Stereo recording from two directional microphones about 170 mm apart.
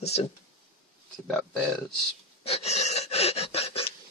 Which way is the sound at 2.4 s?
35° left (ahead or behind).